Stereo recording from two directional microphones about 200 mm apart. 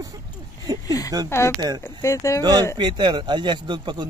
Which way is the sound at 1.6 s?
20° right (ahead or behind).